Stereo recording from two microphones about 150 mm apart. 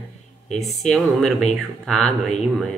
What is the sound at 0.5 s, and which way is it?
Speech, 5° left (ahead or behind).